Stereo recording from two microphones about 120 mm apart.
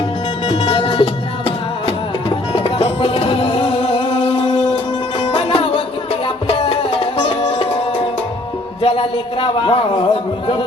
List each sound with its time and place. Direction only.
0.4 s music: 50° left (ahead or behind)
5.3 s music: 50° left (ahead or behind)
8.8 s a sound: 50° left (ahead or behind)